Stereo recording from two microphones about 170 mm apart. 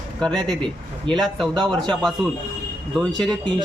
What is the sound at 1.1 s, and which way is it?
Speech, 30° right (ahead or behind).